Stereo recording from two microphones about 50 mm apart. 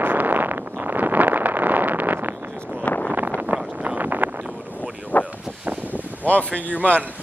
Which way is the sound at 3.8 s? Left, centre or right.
Right.